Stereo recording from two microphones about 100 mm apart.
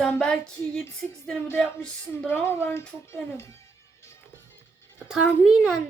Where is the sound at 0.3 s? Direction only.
10° left (ahead or behind).